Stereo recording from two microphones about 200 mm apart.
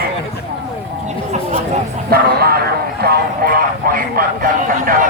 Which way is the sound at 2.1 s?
50° right (ahead or behind).